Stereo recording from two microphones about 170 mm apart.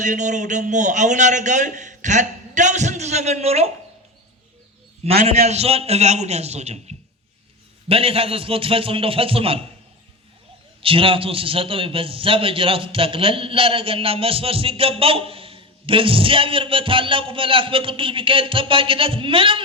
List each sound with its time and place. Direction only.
0.0 s a man's voice: 45° right (ahead or behind)
5.2 s a man's voice: 40° right (ahead or behind)
10.8 s a man's voice: 30° right (ahead or behind)